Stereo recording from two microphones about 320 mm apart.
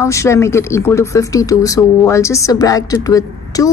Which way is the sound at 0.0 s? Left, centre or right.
Centre.